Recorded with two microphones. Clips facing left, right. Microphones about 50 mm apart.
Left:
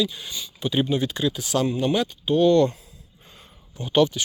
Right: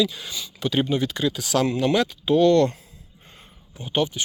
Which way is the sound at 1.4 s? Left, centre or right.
Right.